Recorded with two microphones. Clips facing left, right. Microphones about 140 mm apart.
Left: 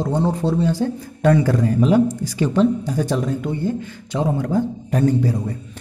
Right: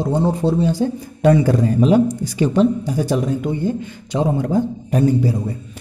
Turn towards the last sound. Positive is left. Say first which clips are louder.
# right 1 dB
turn(degrees=-10)  # may be behind; listen again after turning